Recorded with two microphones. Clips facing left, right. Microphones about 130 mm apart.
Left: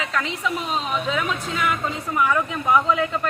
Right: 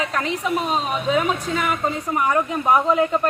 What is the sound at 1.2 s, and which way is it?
Speech, 35° right (ahead or behind).